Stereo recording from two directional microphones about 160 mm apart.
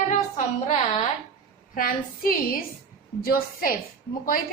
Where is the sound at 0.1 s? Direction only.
55° left (ahead or behind).